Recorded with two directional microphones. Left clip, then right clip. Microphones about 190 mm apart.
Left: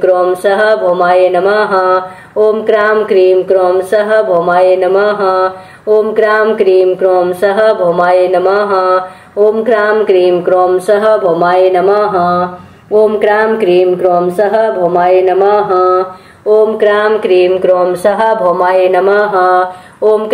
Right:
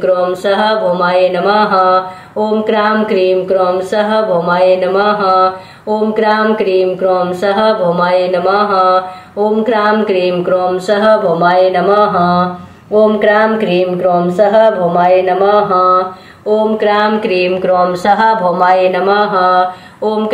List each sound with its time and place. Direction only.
0.0 s speech: 20° left (ahead or behind)
16.8 s speech: 20° left (ahead or behind)